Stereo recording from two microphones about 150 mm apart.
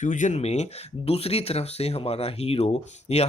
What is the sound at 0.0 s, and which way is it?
Speech, 55° left (ahead or behind).